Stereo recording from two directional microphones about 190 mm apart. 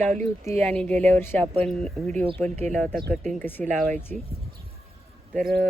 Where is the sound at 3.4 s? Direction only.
10° left (ahead or behind).